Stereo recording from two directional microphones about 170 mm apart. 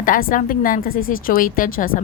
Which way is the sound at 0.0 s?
55° left (ahead or behind).